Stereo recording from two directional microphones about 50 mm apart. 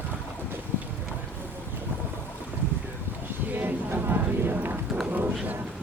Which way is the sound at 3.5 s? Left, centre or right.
Right.